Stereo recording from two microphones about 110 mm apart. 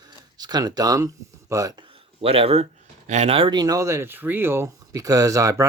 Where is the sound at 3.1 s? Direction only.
75° right (ahead or behind); by 5.6 s 30° right (ahead or behind).